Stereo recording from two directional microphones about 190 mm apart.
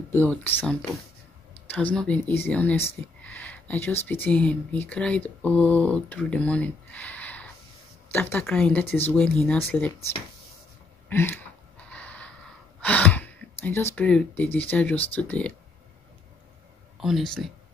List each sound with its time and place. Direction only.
0.1 s speech: 10° left (ahead or behind)
11.1 s a sound: 10° left (ahead or behind)
12.8 s speech: 10° left (ahead or behind)
17.0 s speech: centre (ahead or behind)